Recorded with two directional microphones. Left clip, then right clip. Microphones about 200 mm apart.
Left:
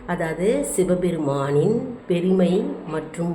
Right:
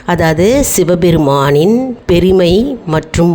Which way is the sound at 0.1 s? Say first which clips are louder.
Right 12 dB; 55° right (ahead or behind).